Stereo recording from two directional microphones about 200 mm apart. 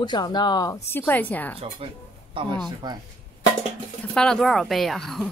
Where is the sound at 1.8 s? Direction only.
30° right (ahead or behind).